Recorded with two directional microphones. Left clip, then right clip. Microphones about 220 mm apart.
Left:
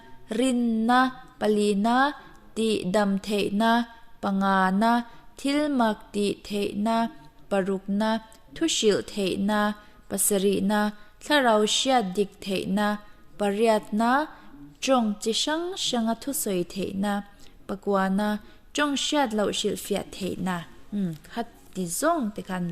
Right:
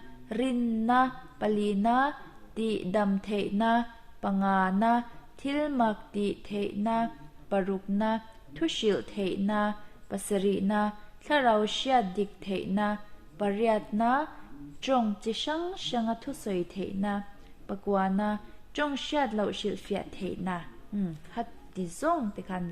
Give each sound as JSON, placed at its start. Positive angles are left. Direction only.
{"t": 0.3, "sound": "a woman's voice", "side_deg": 45}
{"t": 14.8, "sound": "a sound", "side_deg": 50}
{"t": 15.2, "sound": "a woman's voice", "side_deg": 45}